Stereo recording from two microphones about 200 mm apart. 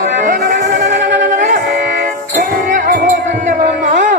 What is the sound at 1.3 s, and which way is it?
Music, 40° right (ahead or behind).